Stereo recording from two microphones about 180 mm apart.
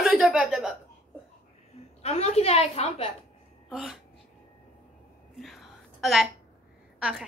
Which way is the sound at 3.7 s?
Centre (ahead or behind).